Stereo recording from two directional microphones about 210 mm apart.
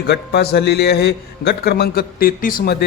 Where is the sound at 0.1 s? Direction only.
50° left (ahead or behind).